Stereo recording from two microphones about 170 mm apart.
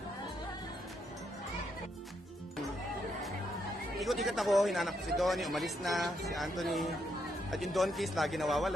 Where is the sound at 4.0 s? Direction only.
Centre (ahead or behind).